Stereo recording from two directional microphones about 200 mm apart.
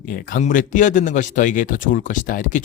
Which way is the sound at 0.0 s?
45° left (ahead or behind).